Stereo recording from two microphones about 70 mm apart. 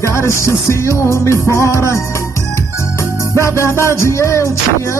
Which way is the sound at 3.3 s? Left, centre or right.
Left.